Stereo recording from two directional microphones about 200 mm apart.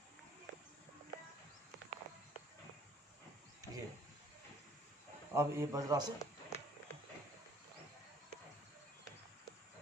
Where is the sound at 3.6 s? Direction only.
15° right (ahead or behind).